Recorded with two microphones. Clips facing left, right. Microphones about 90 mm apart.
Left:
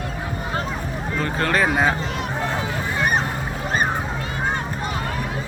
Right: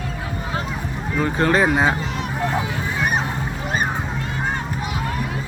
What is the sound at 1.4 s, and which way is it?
Speech, 20° right (ahead or behind).